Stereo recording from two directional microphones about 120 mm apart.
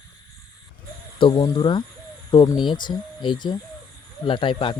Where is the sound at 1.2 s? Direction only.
40° left (ahead or behind).